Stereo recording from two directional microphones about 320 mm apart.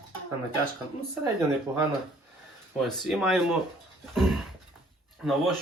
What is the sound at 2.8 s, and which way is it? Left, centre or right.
Speech, centre.